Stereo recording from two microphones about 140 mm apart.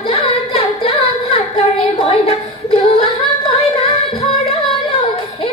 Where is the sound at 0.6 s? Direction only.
45° left (ahead or behind).